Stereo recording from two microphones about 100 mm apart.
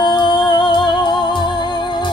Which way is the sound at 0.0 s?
50° left (ahead or behind).